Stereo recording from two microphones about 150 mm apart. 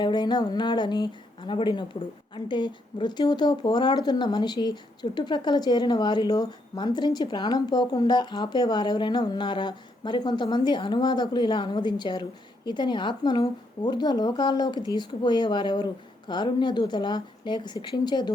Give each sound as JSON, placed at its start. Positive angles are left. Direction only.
{"t": 0.0, "sound": "speech", "side_deg": 30}